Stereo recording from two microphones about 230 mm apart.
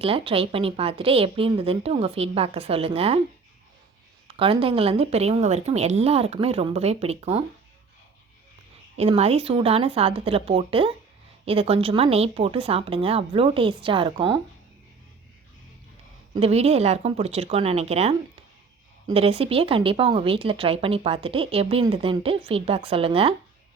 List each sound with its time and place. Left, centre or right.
0.0 s speech: right
4.4 s speech: right
9.0 s speech: right
16.3 s speech: right